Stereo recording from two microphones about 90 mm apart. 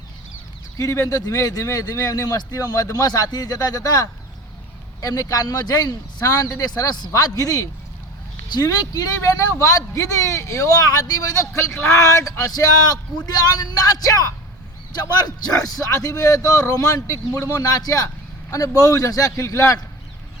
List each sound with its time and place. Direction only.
0.8 s a man's voice: 30° left (ahead or behind)